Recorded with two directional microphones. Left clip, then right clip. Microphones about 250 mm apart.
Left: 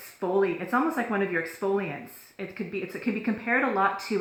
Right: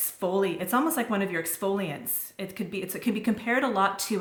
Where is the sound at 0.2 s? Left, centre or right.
Right.